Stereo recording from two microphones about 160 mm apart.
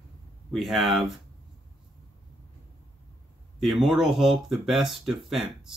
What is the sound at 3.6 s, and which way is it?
Speech, centre (ahead or behind).